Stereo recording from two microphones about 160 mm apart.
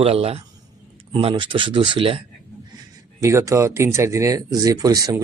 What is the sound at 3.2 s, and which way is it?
Speech, 20° right (ahead or behind).